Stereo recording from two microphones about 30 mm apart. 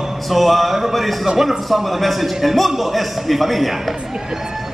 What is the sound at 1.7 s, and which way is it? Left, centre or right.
A man's voice, centre.